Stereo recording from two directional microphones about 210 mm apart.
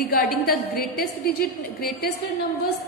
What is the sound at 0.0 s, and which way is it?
A woman's voice, 45° left (ahead or behind).